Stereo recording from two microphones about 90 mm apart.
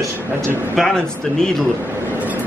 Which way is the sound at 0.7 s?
10° left (ahead or behind).